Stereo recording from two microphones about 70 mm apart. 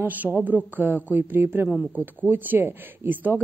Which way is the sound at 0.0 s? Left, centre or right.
Right.